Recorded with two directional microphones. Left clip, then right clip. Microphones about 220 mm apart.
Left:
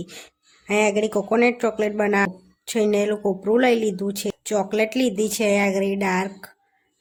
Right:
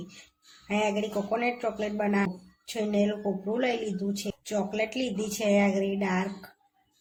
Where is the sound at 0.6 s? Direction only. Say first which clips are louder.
Left 8 dB; 55° left (ahead or behind).